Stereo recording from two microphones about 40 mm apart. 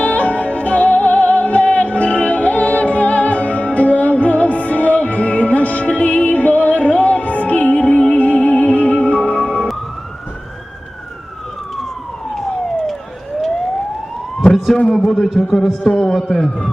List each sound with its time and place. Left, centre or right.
0.0 s music: left
14.8 s a man's voice: centre